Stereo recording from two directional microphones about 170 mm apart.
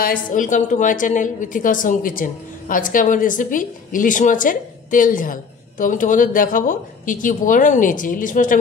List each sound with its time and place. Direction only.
0.0 s a woman's voice: 55° left (ahead or behind)